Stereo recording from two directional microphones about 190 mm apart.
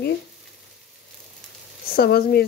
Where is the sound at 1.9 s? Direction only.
55° left (ahead or behind).